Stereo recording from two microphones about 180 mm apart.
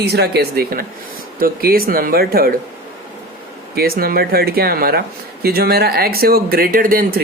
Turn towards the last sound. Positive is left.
turn(degrees=-50)  # may be behind; listen again after turning